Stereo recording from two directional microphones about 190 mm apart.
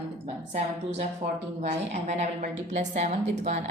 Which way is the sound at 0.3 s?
35° right (ahead or behind).